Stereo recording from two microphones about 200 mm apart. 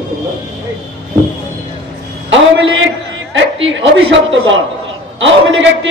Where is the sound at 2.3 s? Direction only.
75° right (ahead or behind).